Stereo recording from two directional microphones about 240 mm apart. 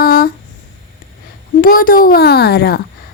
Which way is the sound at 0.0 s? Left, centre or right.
Left.